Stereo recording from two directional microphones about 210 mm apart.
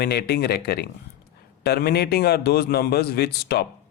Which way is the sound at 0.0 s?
50° left (ahead or behind).